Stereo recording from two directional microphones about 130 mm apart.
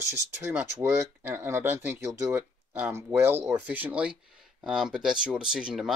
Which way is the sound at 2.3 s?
10° right (ahead or behind).